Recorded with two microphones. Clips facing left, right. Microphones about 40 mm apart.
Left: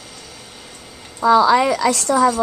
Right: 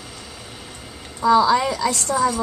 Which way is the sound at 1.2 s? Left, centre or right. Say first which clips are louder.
Left 3 dB; left.